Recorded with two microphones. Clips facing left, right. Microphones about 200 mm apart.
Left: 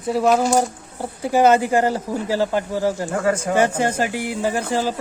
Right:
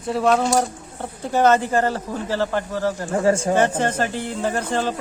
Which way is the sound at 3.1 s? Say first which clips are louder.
Right 2 dB; 25° right (ahead or behind).